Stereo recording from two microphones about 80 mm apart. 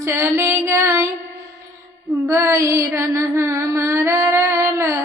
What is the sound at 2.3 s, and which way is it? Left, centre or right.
Mantra, right.